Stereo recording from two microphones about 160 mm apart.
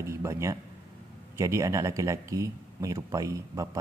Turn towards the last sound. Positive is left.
turn(degrees=-20)  # may be behind; listen again after turning